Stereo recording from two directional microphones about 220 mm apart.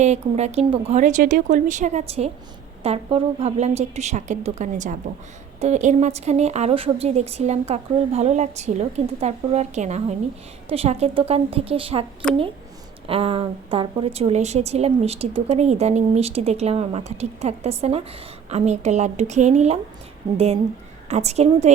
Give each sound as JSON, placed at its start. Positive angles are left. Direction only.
{"t": 0.0, "sound": "a woman's voice", "side_deg": -30}
{"t": 12.2, "sound": "speech", "side_deg": 5}
{"t": 13.1, "sound": "a woman's voice", "side_deg": -25}